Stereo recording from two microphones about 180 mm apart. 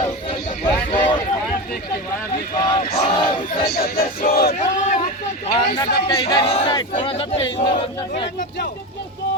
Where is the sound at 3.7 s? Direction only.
60° left (ahead or behind).